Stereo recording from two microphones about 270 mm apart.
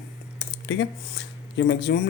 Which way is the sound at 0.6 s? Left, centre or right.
Left.